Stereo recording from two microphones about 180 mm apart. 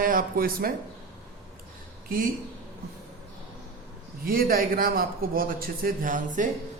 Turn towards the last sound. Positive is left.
turn(degrees=-45)  # may be behind; listen again after turning